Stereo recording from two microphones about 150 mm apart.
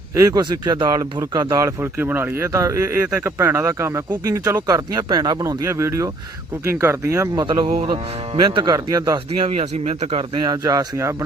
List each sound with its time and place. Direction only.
0.2 s speech: 25° right (ahead or behind)
7.4 s speech: 35° right (ahead or behind)
9.5 s speech: 50° right (ahead or behind)
10.5 s speech: 25° right (ahead or behind)